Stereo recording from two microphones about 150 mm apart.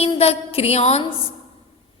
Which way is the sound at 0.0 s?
40° left (ahead or behind).